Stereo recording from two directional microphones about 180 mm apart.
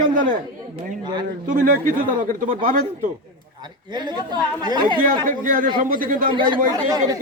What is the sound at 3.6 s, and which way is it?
A woman's voice, 25° right (ahead or behind).